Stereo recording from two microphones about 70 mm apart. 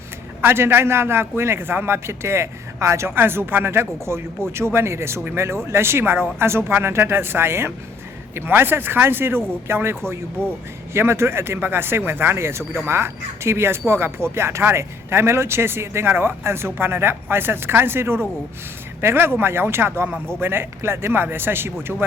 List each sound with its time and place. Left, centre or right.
0.4 s speech: right